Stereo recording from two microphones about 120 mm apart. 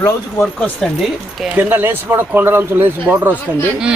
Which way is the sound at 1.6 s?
15° right (ahead or behind).